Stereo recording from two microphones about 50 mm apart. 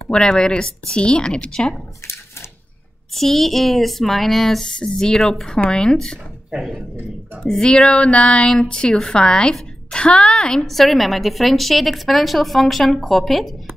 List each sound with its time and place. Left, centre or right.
0.1 s speech: centre
3.2 s a woman's voice: centre
7.4 s a woman's voice: centre